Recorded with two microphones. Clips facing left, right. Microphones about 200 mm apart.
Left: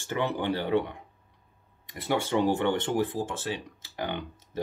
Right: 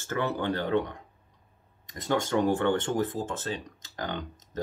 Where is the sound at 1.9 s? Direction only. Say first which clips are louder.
Even; 15° left (ahead or behind).